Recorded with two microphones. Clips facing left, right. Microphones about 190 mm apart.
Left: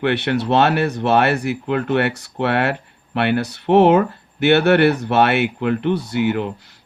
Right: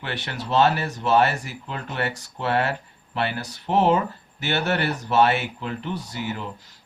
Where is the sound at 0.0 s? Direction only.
65° left (ahead or behind).